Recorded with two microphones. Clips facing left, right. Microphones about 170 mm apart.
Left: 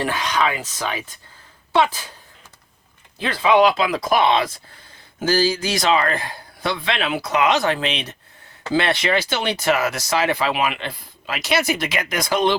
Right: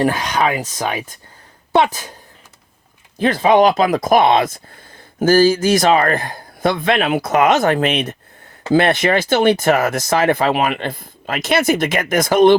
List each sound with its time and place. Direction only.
0.0 s speech: 45° right (ahead or behind)
3.2 s speech: 45° right (ahead or behind)